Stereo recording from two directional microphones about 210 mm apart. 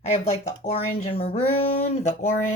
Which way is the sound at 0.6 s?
30° left (ahead or behind).